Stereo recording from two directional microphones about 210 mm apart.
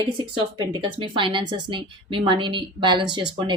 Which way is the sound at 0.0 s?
20° right (ahead or behind).